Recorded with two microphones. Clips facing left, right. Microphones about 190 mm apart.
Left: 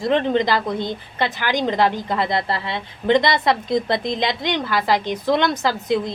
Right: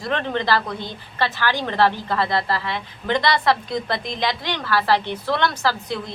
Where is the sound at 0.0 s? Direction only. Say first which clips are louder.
Left 6 dB; 20° left (ahead or behind).